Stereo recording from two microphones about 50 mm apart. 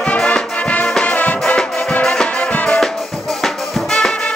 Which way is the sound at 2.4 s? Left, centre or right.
Left.